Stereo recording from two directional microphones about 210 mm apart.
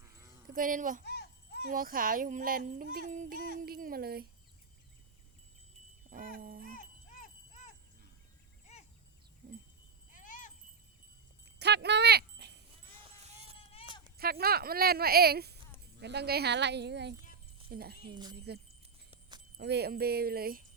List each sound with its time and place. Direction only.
0.5 s speech: 40° right (ahead or behind)
1.0 s children playing: 50° left (ahead or behind)
1.6 s speech: 40° right (ahead or behind)
6.1 s dog: 40° right (ahead or behind)
6.7 s a sound: 40° left (ahead or behind)
8.7 s a sound: 30° left (ahead or behind)
10.1 s a sound: 40° left (ahead or behind)
11.6 s a sound: 55° right (ahead or behind)
12.9 s music: 25° right (ahead or behind)
13.6 s clip-clop: 25° left (ahead or behind)
14.2 s speech: 45° right (ahead or behind)
18.1 s speech: 20° right (ahead or behind)
18.3 s speech: 50° right (ahead or behind)